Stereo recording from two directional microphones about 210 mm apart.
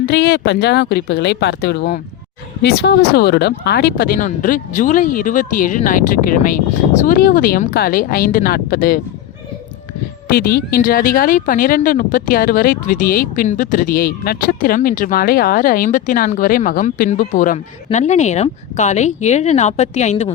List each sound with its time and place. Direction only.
0.0 s speech: 55° left (ahead or behind)
10.2 s speech: 45° left (ahead or behind)